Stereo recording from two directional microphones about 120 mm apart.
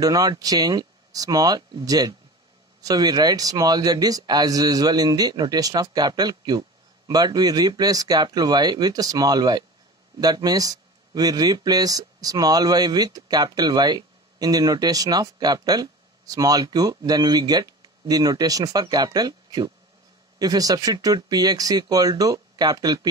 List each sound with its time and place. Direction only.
0.0 s speech: 30° right (ahead or behind)